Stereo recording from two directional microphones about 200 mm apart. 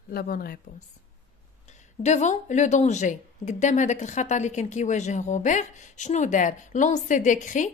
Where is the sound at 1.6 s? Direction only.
35° left (ahead or behind).